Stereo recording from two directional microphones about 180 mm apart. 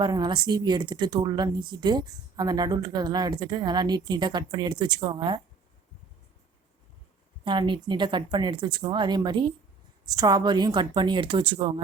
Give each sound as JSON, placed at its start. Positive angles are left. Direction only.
{"t": 0.0, "sound": "a woman's voice", "side_deg": -25}
{"t": 7.4, "sound": "a woman's voice", "side_deg": -25}